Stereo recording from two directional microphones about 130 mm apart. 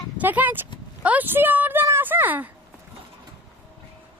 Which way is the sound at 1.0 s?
10° right (ahead or behind).